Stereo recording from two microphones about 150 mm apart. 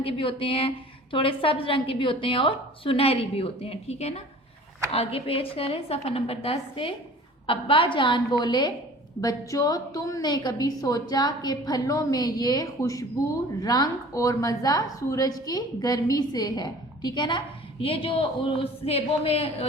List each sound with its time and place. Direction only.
0.0 s a woman's voice: 35° left (ahead or behind)